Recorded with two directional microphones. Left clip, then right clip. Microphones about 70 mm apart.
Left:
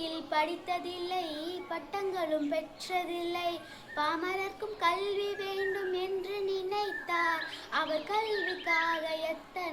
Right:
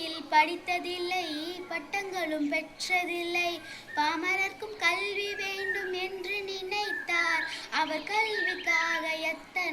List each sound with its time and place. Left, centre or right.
0.0 s child singing: left